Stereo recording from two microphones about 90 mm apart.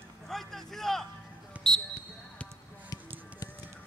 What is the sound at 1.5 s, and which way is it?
Basketball bounce, 15° right (ahead or behind).